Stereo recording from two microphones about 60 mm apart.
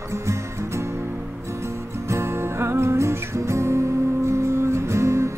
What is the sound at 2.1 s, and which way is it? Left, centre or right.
Music, right.